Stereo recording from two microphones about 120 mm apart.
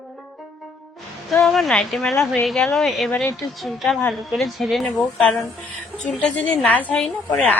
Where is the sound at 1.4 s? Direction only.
5° left (ahead or behind).